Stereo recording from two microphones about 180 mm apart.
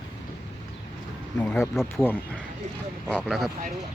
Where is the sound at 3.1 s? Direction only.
Centre (ahead or behind).